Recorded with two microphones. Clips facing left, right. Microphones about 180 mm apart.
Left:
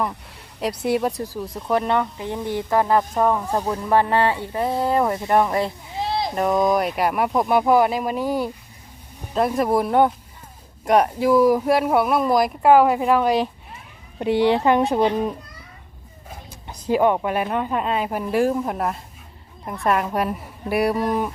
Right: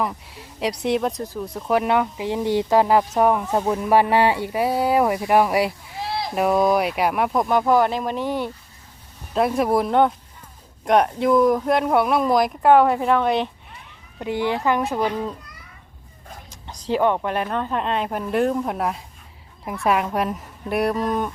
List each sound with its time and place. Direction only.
0.0 s a woman's voice: centre (ahead or behind)
6.0 s a sound: 20° left (ahead or behind)
6.3 s a woman's voice: 5° right (ahead or behind)
7.5 s a woman's voice: 10° left (ahead or behind)
14.2 s speech: 20° left (ahead or behind)
16.6 s a woman's voice: 10° left (ahead or behind)